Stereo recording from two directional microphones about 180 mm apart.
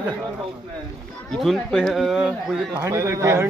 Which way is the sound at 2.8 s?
15° right (ahead or behind).